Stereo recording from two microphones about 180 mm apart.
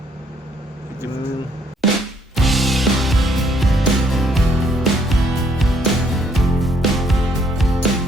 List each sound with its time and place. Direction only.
2.3 s music: centre (ahead or behind)